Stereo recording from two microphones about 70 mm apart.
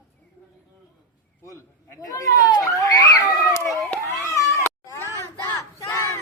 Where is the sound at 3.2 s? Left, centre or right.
Left.